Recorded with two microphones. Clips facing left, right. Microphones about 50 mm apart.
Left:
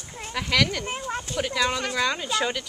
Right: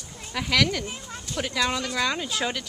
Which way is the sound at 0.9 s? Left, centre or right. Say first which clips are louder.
Left 7 dB; left.